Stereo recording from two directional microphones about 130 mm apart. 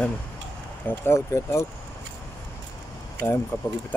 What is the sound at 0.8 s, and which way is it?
Speech, 20° left (ahead or behind).